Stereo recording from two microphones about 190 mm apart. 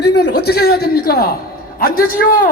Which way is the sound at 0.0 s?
60° left (ahead or behind).